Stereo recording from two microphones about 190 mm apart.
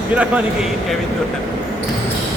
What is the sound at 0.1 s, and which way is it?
Speech, 5° right (ahead or behind).